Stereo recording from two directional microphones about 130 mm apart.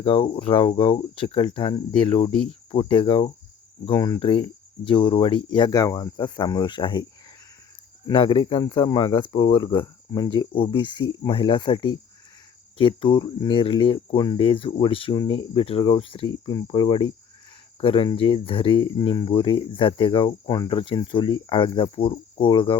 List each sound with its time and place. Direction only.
0.0 s speech: 45° left (ahead or behind)
4.2 s speech: 45° left (ahead or behind)
8.0 s speech: 40° left (ahead or behind)
10.9 s speech: 30° left (ahead or behind)